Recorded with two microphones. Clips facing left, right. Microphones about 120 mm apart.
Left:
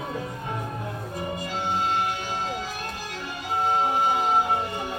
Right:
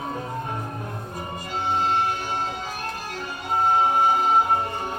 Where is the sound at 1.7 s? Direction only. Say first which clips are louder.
Right 3 dB; 45° right (ahead or behind).